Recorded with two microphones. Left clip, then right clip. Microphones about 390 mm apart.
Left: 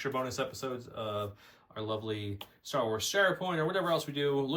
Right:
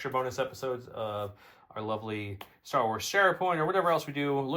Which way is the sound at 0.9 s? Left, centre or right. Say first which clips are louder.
Right 2 dB; centre.